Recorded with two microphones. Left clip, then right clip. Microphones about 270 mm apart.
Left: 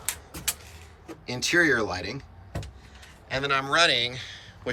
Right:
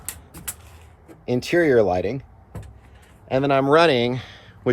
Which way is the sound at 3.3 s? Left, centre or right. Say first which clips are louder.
Right 8 dB; centre.